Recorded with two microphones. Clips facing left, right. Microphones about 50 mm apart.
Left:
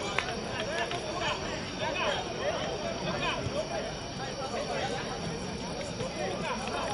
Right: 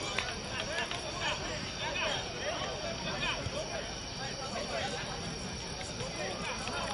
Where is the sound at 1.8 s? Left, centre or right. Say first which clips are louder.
Left 5 dB; centre.